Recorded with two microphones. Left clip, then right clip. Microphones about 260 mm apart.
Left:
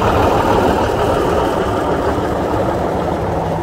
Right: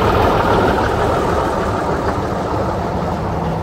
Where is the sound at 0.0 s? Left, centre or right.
Left.